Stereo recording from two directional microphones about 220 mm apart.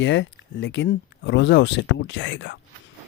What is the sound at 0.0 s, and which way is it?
Speech, 55° left (ahead or behind).